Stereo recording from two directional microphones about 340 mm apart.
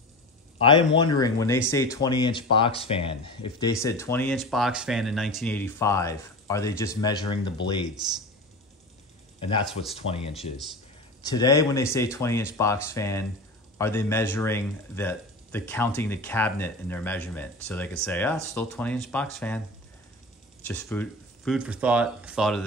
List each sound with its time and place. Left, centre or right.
0.6 s speech: centre
9.4 s speech: centre
20.6 s speech: centre